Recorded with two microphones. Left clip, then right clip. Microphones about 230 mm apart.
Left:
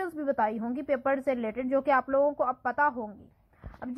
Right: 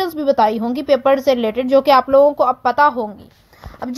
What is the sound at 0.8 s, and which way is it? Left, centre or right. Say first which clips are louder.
A woman's voice: right 14 dB; right.